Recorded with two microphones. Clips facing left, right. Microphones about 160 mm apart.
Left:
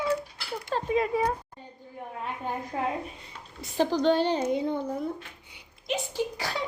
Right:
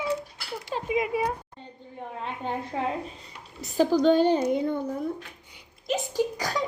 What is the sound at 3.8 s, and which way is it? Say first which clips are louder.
Speech: right 3 dB; 40° right (ahead or behind).